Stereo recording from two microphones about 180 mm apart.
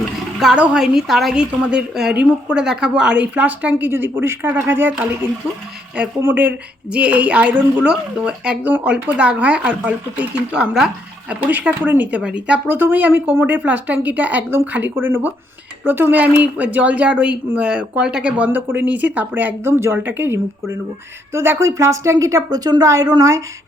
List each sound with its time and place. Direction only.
0.3 s speech: 5° right (ahead or behind)